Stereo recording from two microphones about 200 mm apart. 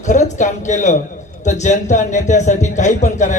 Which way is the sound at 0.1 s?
35° left (ahead or behind).